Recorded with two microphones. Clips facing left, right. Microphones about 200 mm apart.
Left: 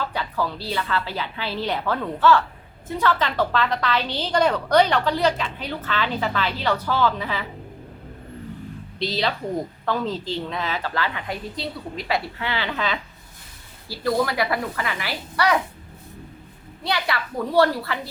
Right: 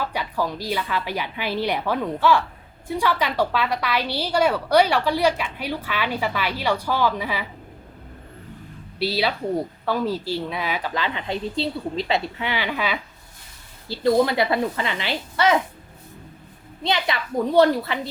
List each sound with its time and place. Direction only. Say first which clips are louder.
0.0 s a woman's voice: right 1 dB; 10° right (ahead or behind)
9.0 s a woman's voice: right 2 dB; 10° right (ahead or behind)
13.8 s speech: right 4 dB; 25° right (ahead or behind)
16.8 s speech: right 2 dB; 20° right (ahead or behind)